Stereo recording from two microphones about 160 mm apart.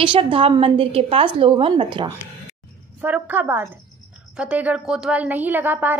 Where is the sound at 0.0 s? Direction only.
35° right (ahead or behind).